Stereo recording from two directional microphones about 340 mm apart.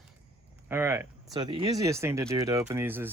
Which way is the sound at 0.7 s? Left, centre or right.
Centre.